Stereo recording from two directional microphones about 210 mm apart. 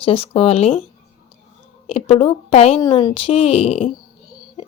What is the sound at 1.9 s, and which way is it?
A woman's voice, 25° left (ahead or behind).